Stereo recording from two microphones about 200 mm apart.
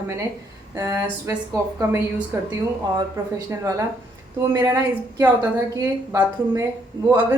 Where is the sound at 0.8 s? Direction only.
20° right (ahead or behind).